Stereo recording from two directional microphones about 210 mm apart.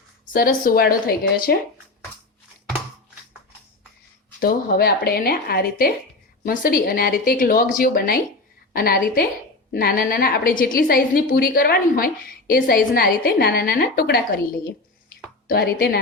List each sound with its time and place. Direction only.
0.3 s a woman's voice: 45° left (ahead or behind)
4.4 s a woman's voice: 45° left (ahead or behind)